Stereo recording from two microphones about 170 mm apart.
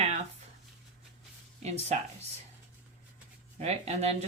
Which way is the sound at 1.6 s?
40° right (ahead or behind).